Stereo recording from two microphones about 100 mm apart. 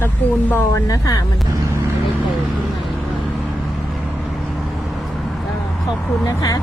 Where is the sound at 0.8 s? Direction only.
35° left (ahead or behind).